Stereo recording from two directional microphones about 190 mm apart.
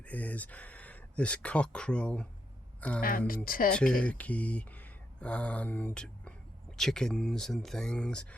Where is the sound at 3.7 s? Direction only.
5° left (ahead or behind).